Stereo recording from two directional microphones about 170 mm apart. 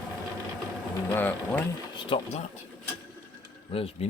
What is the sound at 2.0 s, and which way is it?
Speech, 30° left (ahead or behind).